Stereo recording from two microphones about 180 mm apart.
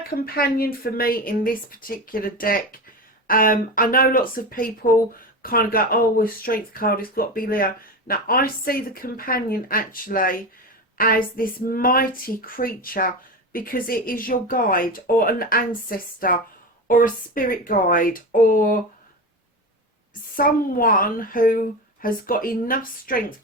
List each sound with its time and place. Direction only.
0.3 s speech: 55° left (ahead or behind)
20.3 s speech: 50° left (ahead or behind)